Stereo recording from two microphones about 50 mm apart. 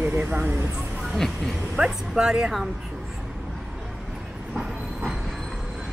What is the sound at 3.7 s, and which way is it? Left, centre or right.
Vehicle, centre.